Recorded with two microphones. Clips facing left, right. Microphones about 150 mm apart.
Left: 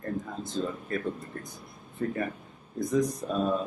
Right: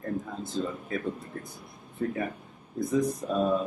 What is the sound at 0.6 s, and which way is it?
Speech, centre (ahead or behind).